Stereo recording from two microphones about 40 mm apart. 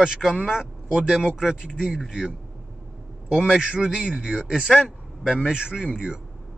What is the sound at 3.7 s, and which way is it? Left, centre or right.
Speech, right.